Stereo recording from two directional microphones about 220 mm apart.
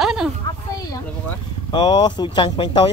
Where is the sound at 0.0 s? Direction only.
Centre (ahead or behind).